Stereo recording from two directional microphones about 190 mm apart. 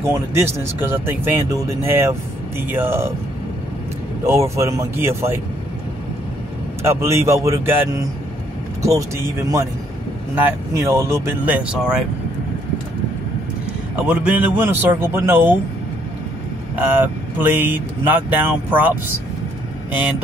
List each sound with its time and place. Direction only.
0.1 s speech: 15° right (ahead or behind)
4.3 s speech: 15° right (ahead or behind)
6.8 s speech: 15° right (ahead or behind)
10.3 s speech: 10° right (ahead or behind)
14.0 s speech: 10° right (ahead or behind)
16.7 s speech: 10° right (ahead or behind)